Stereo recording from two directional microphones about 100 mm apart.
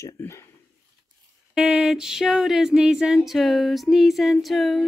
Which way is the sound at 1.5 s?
5° right (ahead or behind).